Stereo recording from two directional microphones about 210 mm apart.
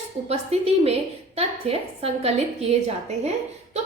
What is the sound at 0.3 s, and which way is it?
A woman's voice, 30° right (ahead or behind).